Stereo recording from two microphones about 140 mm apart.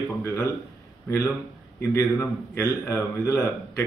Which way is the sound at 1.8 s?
15° left (ahead or behind).